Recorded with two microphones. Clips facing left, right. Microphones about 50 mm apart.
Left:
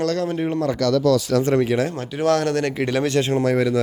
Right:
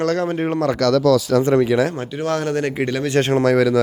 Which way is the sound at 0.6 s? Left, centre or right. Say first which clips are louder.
Right 3 dB; right.